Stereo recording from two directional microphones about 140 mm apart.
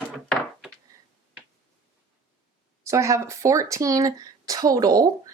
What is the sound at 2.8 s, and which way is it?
Speech, 20° right (ahead or behind).